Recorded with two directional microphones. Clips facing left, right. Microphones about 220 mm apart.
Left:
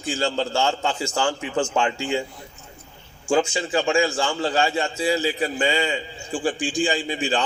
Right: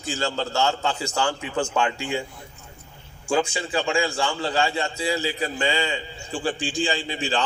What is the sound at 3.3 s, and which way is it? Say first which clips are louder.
A man's voice: left 3 dB; 25° left (ahead or behind).